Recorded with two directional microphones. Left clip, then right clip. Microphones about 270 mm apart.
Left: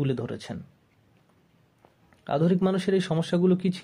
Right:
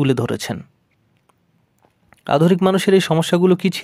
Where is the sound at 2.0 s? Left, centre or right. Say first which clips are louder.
Right 10 dB; right.